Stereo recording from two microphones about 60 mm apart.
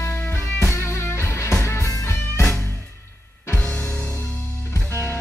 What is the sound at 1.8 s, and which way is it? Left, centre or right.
Music, left.